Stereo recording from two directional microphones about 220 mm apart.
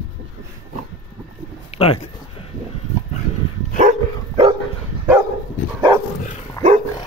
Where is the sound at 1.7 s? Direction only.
30° left (ahead or behind).